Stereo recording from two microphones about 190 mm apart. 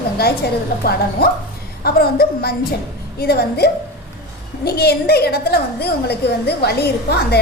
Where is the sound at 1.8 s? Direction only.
55° left (ahead or behind).